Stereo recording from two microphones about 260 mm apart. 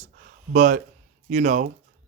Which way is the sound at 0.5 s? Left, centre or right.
Right.